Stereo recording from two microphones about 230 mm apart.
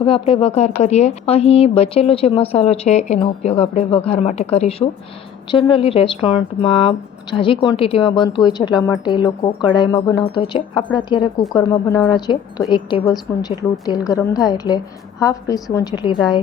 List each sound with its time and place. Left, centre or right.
0.0 s a woman's voice: left